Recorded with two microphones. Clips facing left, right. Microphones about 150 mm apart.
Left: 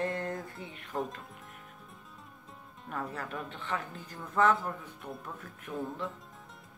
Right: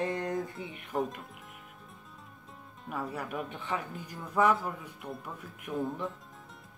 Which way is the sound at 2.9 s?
10° right (ahead or behind).